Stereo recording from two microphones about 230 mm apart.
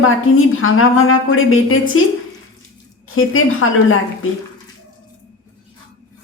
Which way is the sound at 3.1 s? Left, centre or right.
Left.